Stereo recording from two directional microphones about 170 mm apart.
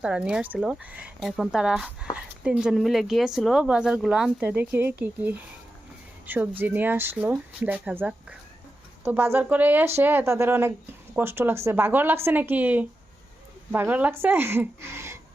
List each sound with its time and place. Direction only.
0.0 s a woman's voice: 5° right (ahead or behind)